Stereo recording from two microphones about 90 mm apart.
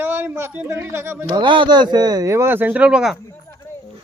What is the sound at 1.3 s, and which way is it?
Speech, 65° right (ahead or behind).